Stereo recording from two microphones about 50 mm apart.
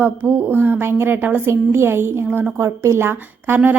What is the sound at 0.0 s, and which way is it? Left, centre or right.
A woman's voice, right.